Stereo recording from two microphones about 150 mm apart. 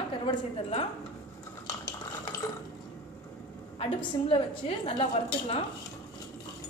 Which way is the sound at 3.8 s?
35° left (ahead or behind).